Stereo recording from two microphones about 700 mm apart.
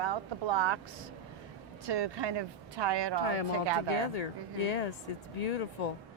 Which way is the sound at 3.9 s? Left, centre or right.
Left.